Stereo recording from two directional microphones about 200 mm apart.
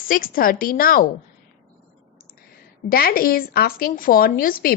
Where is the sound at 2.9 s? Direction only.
50° left (ahead or behind).